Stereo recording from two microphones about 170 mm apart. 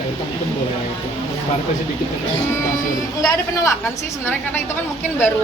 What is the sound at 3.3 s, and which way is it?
Speech, 20° left (ahead or behind).